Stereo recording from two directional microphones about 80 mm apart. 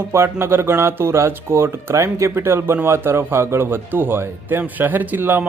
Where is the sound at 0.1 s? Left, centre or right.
Right.